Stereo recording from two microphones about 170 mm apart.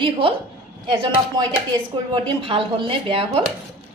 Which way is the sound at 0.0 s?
30° right (ahead or behind).